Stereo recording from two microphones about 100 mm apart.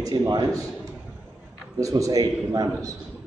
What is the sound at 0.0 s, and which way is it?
Speech, 35° right (ahead or behind).